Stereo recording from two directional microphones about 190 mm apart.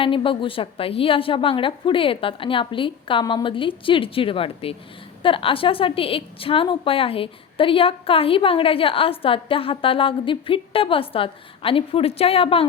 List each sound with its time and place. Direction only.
0.0 s a woman's voice: 25° left (ahead or behind)